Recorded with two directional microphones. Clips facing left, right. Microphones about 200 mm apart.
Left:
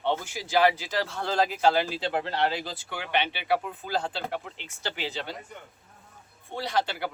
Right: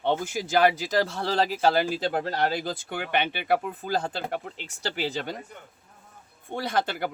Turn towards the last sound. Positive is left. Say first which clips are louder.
# right 1 dB
turn(degrees=-50)  # may be behind; listen again after turning